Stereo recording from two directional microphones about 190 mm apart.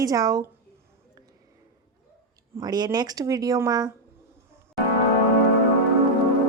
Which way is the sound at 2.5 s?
20° right (ahead or behind).